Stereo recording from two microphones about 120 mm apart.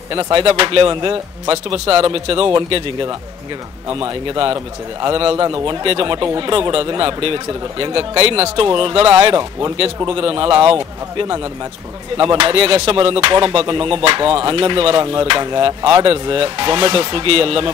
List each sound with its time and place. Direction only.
0.1 s music: 40° right (ahead or behind)
9.3 s speech: 30° right (ahead or behind)
10.0 s music: 50° right (ahead or behind)